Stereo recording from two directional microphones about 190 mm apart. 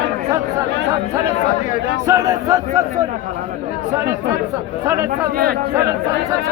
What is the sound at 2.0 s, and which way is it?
Speech, 15° right (ahead or behind).